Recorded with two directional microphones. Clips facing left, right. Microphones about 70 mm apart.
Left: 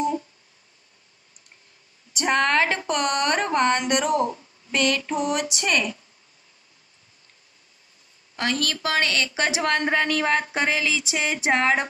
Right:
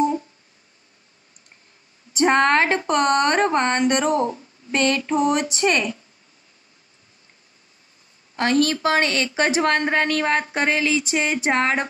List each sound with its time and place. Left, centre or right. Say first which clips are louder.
2.1 s a woman's voice: right 4 dB; right
8.4 s a woman's voice: right 7 dB; right